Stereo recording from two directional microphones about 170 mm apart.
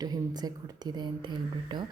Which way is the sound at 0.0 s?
25° right (ahead or behind).